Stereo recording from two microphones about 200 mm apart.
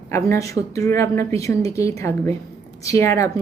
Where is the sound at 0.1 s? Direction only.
15° left (ahead or behind).